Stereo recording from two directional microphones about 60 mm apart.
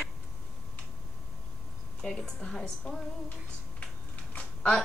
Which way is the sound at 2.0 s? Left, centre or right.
Centre.